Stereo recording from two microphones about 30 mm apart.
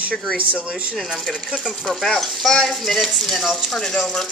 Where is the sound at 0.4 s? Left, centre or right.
Right.